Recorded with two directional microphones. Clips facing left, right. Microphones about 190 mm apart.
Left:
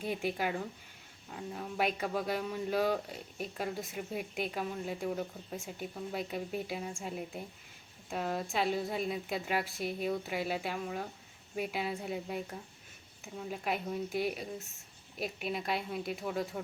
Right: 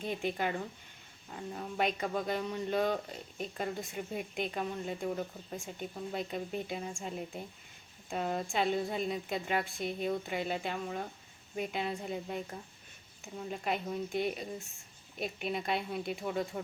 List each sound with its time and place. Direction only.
0.0 s speech: 5° left (ahead or behind)